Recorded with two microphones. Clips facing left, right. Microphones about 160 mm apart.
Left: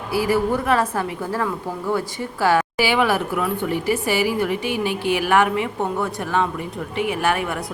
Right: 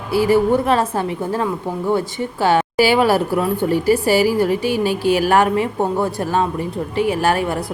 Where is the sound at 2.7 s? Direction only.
40° right (ahead or behind).